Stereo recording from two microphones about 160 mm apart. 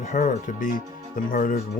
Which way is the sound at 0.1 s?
55° left (ahead or behind).